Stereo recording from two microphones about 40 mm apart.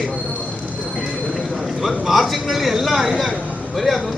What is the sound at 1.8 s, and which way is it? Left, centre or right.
A man's voice, centre.